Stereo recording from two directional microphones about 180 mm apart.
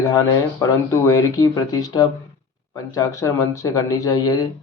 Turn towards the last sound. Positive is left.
turn(degrees=20)  # may be behind; listen again after turning